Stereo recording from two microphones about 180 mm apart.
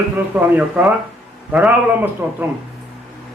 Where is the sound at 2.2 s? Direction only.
5° right (ahead or behind).